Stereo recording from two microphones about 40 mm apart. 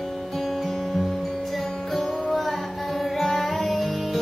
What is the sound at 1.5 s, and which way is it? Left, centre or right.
Music, centre.